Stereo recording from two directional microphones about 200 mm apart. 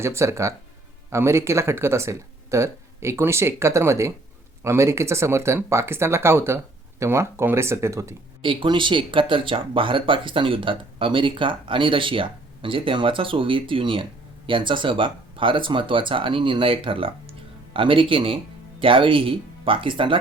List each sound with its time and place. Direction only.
0.0 s speech: 15° right (ahead or behind)